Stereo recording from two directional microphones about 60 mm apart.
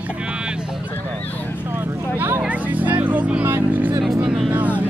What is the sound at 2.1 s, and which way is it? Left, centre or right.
Vehicle, right.